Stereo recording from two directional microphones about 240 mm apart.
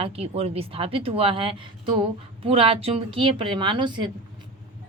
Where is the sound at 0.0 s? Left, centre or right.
Right.